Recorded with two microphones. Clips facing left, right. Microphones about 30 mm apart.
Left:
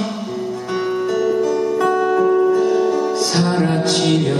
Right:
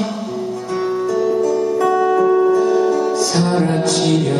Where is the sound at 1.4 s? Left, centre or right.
Left.